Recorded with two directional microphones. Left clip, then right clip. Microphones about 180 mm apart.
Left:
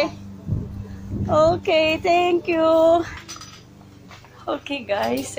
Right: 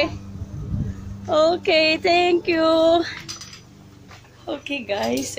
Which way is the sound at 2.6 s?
30° right (ahead or behind).